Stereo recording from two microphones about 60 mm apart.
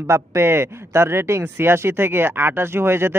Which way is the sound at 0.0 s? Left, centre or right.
Right.